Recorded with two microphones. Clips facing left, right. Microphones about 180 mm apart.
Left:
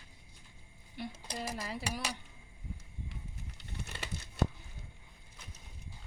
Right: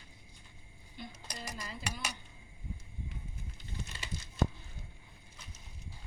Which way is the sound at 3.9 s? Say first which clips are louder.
Left 3 dB; 60° left (ahead or behind).